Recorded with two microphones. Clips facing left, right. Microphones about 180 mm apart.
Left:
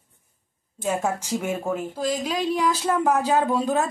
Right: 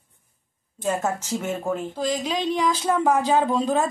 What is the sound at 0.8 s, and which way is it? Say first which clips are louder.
A woman's voice: even; 10° left (ahead or behind).